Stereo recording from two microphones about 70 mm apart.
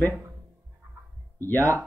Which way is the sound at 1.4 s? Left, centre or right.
Left.